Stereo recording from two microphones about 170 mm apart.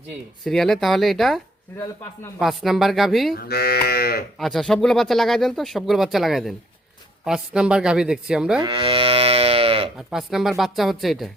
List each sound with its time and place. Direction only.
0.4 s speech: centre (ahead or behind)
2.4 s speech: centre (ahead or behind)
3.3 s cattle: 65° left (ahead or behind)
4.4 s speech: centre (ahead or behind)
8.6 s moo: 30° right (ahead or behind)
10.1 s speech: 5° right (ahead or behind)